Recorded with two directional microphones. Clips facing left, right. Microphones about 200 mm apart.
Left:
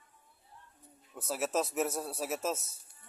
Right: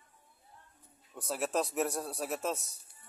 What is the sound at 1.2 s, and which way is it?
A man's voice, centre (ahead or behind).